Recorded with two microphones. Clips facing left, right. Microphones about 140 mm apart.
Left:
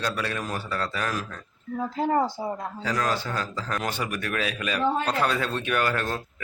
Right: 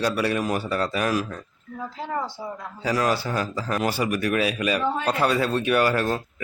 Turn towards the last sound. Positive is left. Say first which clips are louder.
# right 5 dB
turn(degrees=-5)  # may be behind; listen again after turning